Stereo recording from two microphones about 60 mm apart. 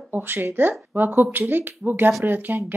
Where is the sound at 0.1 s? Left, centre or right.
Right.